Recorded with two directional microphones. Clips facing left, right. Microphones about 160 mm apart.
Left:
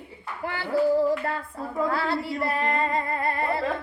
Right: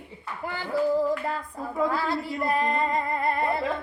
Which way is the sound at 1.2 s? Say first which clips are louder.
Left 1 dB; 15° right (ahead or behind).